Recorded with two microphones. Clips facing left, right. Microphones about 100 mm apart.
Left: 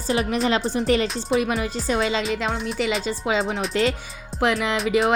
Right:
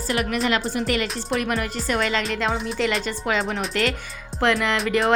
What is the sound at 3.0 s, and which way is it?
Music, 15° left (ahead or behind).